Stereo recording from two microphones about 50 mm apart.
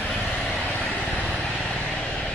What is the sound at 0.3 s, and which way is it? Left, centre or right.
Vehicle, centre.